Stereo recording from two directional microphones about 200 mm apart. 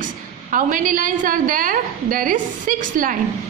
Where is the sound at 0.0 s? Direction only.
40° right (ahead or behind).